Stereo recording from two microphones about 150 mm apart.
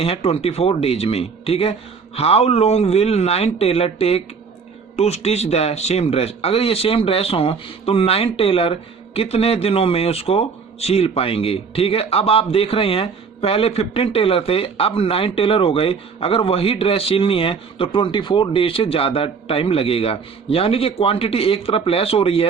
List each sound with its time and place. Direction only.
0.0 s speech: 40° left (ahead or behind)